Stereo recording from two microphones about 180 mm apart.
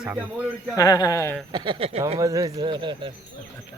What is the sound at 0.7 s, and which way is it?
Speech, 20° left (ahead or behind).